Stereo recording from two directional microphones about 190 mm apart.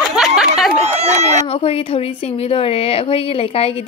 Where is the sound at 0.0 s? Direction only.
5° right (ahead or behind).